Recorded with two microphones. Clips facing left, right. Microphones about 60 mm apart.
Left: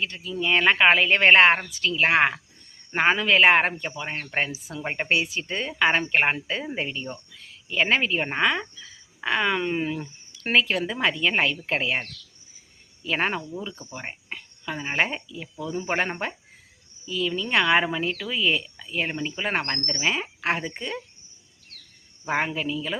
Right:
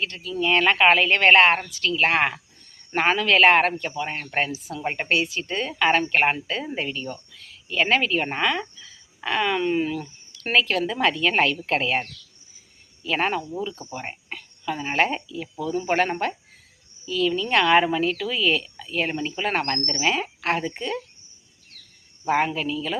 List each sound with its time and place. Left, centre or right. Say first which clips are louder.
0.3 s a woman's voice: right 1 dB; centre
4.1 s speech: left 2 dB; centre
5.0 s a woman's voice: even; left
13.1 s a woman's voice: right 2 dB; centre
14.1 s a sound: right 1 dB; centre
14.7 s speech: right 3 dB; centre
17.3 s speech: right 2 dB; centre
22.3 s speech: right 3 dB; centre